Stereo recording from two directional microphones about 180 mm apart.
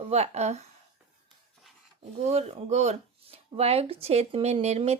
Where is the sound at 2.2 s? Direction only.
35° right (ahead or behind).